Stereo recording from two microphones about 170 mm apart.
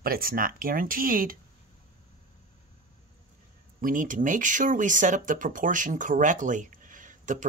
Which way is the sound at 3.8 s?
50° right (ahead or behind).